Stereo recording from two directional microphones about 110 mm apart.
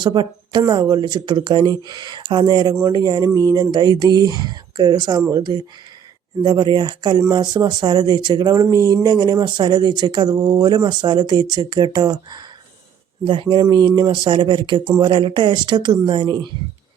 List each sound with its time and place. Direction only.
0.0 s speech: 45° right (ahead or behind)